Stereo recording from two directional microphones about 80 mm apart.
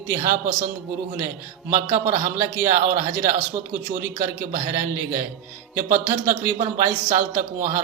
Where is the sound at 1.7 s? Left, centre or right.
Right.